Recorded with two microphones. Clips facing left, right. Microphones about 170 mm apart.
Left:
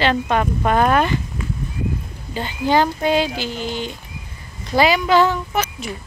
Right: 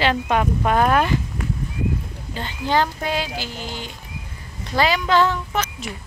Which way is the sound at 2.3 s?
10° left (ahead or behind).